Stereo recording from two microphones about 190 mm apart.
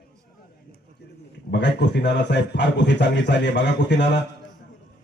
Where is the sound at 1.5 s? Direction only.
65° left (ahead or behind).